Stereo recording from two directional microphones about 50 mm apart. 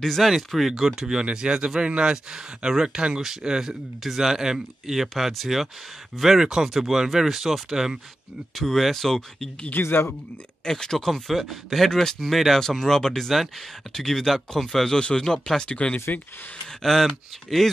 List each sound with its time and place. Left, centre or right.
0.0 s speech: centre
8.5 s speech: centre
9.7 s speech: left
10.6 s speech: centre
16.8 s speech: centre